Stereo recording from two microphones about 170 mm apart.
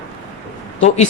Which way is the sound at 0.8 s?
40° left (ahead or behind).